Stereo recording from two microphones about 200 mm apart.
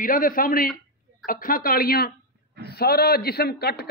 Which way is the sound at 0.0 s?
45° left (ahead or behind).